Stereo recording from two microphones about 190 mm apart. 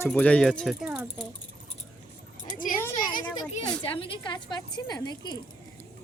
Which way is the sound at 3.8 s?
30° left (ahead or behind).